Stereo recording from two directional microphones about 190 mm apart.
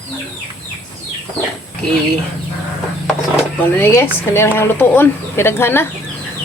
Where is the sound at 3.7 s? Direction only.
15° left (ahead or behind).